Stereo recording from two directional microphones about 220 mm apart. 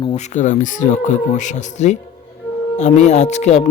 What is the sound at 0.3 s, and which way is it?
Speech, 35° left (ahead or behind).